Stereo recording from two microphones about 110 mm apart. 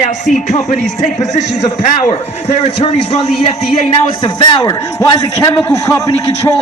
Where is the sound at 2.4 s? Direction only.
90° left.